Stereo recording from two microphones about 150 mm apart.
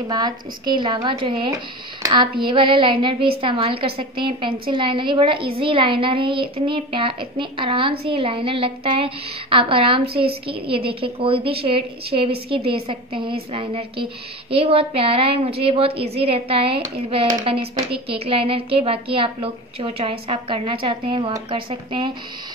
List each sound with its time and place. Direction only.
0.1 s a woman's voice: 30° right (ahead or behind)